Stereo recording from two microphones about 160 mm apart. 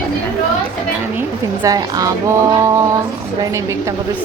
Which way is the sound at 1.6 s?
20° right (ahead or behind).